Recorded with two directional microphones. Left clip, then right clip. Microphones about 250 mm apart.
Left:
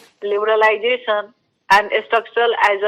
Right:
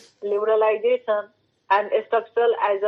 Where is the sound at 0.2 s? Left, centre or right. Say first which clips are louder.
Left 5 dB; left.